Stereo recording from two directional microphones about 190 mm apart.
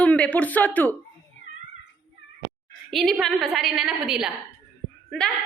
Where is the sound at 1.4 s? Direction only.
40° right (ahead or behind).